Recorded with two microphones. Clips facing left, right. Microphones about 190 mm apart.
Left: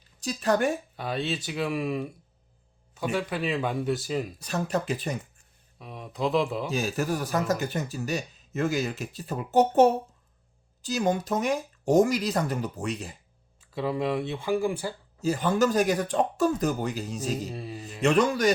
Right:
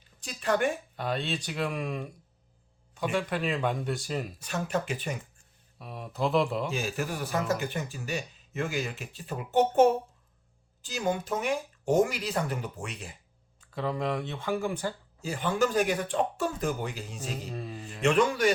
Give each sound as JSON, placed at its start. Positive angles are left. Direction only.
{"t": 0.2, "sound": "speech", "side_deg": 40}
{"t": 0.9, "sound": "speech", "side_deg": 5}
{"t": 4.4, "sound": "speech", "side_deg": 35}
{"t": 5.8, "sound": "speech", "side_deg": -5}
{"t": 6.7, "sound": "speech", "side_deg": 40}
{"t": 13.6, "sound": "speech", "side_deg": 10}
{"t": 15.2, "sound": "speech", "side_deg": 40}
{"t": 17.5, "sound": "speech", "side_deg": 10}
{"t": 18.0, "sound": "speech", "side_deg": 40}